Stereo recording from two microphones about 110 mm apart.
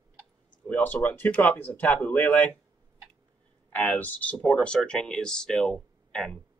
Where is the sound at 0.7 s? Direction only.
15° left (ahead or behind).